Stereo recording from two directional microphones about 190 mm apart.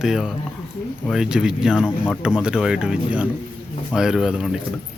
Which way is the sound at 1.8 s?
10° left (ahead or behind).